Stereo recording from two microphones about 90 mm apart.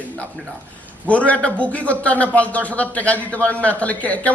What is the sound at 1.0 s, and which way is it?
A man's voice, 15° left (ahead or behind).